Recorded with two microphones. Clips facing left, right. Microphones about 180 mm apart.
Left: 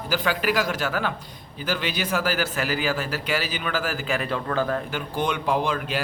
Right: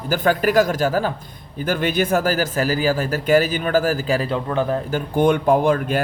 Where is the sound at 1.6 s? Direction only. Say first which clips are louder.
Right 7 dB; 50° right (ahead or behind); by 4.8 s 20° right (ahead or behind).